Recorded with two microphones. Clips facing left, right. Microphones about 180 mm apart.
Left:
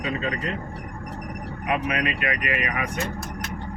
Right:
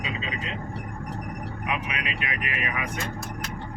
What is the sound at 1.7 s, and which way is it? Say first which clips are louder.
Speech: left 7 dB; 50° left (ahead or behind).